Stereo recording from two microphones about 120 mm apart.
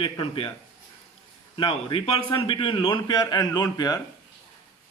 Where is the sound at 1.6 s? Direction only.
45° left (ahead or behind).